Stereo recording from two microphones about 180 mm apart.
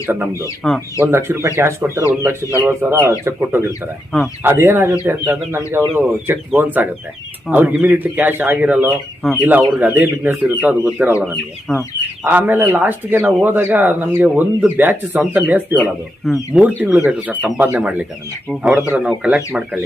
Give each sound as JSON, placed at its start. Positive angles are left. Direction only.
{"t": 0.0, "sound": "speech", "side_deg": -15}
{"t": 0.6, "sound": "speech", "side_deg": 5}
{"t": 1.0, "sound": "speech", "side_deg": -15}
{"t": 9.2, "sound": "speech", "side_deg": 0}
{"t": 9.5, "sound": "speech", "side_deg": -10}
{"t": 12.2, "sound": "speech", "side_deg": -10}